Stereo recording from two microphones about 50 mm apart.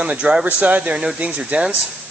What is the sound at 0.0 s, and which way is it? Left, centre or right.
Speech, right.